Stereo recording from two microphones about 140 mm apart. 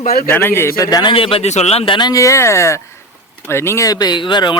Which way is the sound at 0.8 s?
30° left (ahead or behind).